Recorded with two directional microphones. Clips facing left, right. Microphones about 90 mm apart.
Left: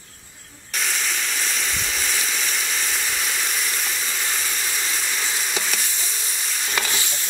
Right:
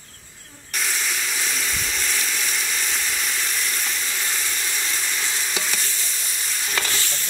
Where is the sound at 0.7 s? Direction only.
Centre (ahead or behind).